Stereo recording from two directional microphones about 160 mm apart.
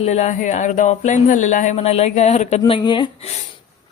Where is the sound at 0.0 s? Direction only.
45° left (ahead or behind).